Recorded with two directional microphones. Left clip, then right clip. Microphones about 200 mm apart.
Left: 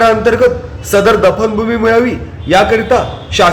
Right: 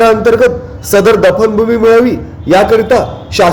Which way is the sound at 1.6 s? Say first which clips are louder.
Right 3 dB; 25° right (ahead or behind).